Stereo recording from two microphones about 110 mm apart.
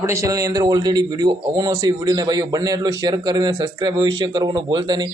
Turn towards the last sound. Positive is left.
turn(degrees=-40)  # may be behind; listen again after turning